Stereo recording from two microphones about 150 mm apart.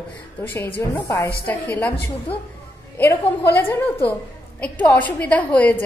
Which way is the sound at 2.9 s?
15° left (ahead or behind).